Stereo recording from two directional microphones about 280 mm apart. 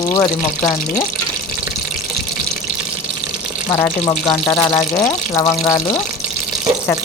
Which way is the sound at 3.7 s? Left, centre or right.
Centre.